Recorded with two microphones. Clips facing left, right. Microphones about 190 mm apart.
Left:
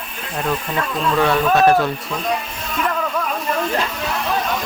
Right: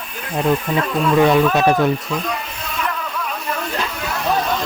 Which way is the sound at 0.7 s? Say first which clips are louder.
Right 4 dB; 15° right (ahead or behind).